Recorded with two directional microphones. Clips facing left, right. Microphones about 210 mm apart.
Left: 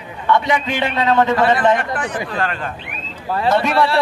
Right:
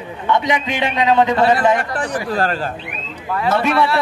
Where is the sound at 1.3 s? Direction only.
30° right (ahead or behind).